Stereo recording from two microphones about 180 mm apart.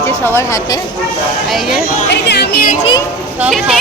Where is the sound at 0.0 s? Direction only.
15° left (ahead or behind).